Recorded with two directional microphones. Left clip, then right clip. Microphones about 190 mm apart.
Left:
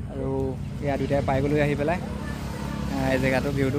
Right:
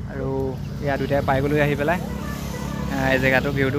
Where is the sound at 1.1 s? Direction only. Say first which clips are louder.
Right 3 dB; 5° left (ahead or behind).